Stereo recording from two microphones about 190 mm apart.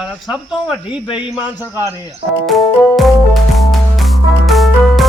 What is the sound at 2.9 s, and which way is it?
Music, centre (ahead or behind).